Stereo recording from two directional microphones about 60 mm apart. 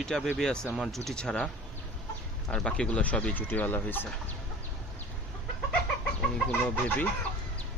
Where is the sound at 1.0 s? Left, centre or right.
Centre.